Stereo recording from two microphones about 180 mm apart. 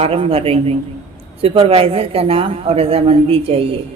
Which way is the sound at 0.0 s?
35° right (ahead or behind).